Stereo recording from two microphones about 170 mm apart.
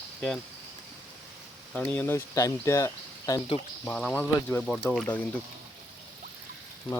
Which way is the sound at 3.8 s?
5° left (ahead or behind).